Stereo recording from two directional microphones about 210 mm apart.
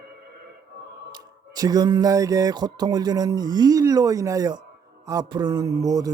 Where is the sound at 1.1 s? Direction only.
20° right (ahead or behind).